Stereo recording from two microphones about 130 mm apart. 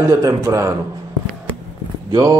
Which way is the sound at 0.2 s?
25° right (ahead or behind).